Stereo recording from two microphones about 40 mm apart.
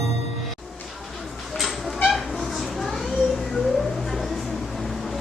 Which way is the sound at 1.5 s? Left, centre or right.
Centre.